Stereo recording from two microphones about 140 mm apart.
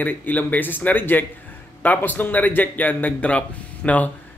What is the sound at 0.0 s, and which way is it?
A man's voice, 10° left (ahead or behind).